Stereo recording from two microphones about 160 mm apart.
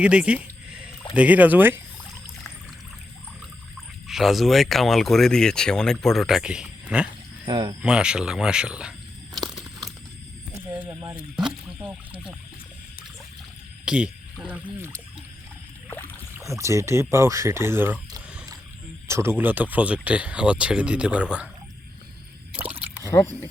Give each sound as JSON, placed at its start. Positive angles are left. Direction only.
{"t": 0.0, "sound": "a sound", "side_deg": -5}
{"t": 1.1, "sound": "speech", "side_deg": -10}
{"t": 4.0, "sound": "speech", "side_deg": 0}
{"t": 7.4, "sound": "speech", "side_deg": -30}
{"t": 7.8, "sound": "speech", "side_deg": -5}
{"t": 9.5, "sound": "crumpling", "side_deg": 0}
{"t": 10.8, "sound": "a sound", "side_deg": -10}
{"t": 11.8, "sound": "speech", "side_deg": -10}
{"t": 13.8, "sound": "speech", "side_deg": -5}
{"t": 16.3, "sound": "speech", "side_deg": -20}
{"t": 19.0, "sound": "speech", "side_deg": -15}
{"t": 23.0, "sound": "speech", "side_deg": 20}